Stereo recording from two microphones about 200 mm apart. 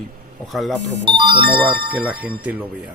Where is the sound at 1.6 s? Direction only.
5° right (ahead or behind).